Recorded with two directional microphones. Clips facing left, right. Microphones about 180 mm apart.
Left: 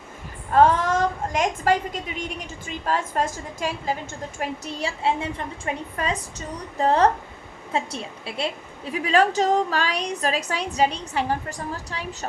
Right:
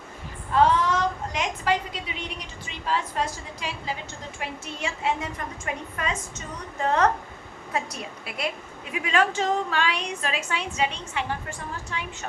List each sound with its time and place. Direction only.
0.5 s a woman's voice: 50° left (ahead or behind)
4.4 s a woman's voice: 35° left (ahead or behind)